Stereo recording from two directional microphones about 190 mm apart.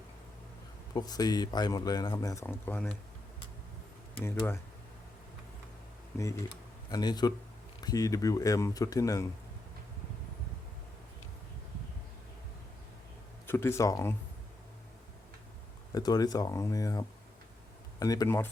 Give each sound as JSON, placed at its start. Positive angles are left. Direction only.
{"t": 0.9, "sound": "speech", "side_deg": 20}
{"t": 4.2, "sound": "speech", "side_deg": 15}
{"t": 6.1, "sound": "speech", "side_deg": 15}
{"t": 13.5, "sound": "speech", "side_deg": 15}
{"t": 15.9, "sound": "speech", "side_deg": 20}